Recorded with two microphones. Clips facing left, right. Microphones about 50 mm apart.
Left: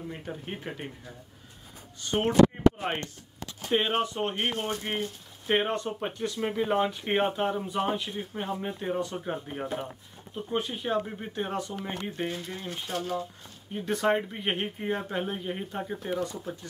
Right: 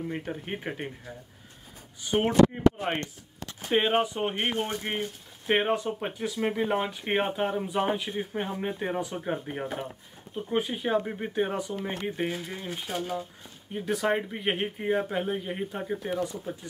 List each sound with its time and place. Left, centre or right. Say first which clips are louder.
0.3 s speech: right 3 dB; right
3.6 s speech: right 2 dB; centre